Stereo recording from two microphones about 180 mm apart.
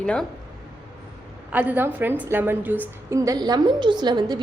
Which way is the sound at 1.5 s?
10° right (ahead or behind).